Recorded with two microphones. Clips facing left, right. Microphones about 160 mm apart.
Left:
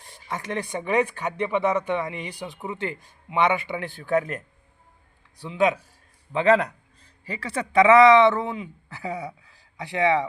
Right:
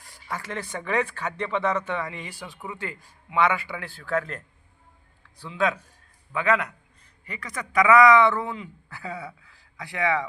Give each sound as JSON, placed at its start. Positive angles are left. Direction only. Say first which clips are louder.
{"t": 0.0, "sound": "speech", "louder": "left 2 dB", "side_deg": 25}
{"t": 6.3, "sound": "a man's voice", "louder": "left 5 dB", "side_deg": 30}